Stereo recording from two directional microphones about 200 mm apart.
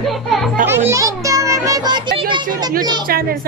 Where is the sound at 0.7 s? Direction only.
10° right (ahead or behind).